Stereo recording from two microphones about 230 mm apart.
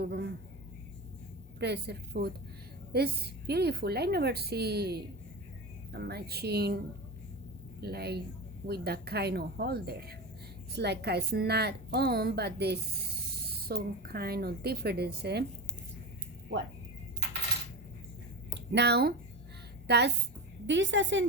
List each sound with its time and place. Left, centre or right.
0.1 s a sound: right
1.5 s a woman's voice: right
7.8 s a woman's voice: right
18.5 s a woman's voice: right